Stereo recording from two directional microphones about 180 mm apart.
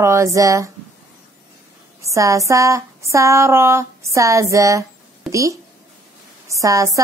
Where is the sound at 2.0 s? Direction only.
15° right (ahead or behind).